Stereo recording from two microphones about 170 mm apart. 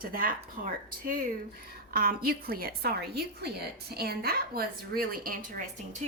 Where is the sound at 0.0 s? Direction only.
55° right (ahead or behind).